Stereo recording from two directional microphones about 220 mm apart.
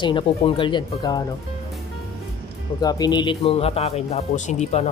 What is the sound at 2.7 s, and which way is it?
Speech, 15° left (ahead or behind).